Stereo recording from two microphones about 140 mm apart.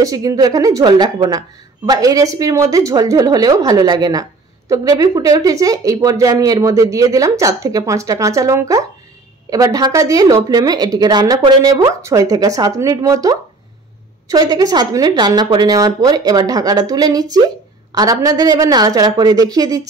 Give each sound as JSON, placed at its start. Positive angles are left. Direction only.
{"t": 0.0, "sound": "a woman's voice", "side_deg": -25}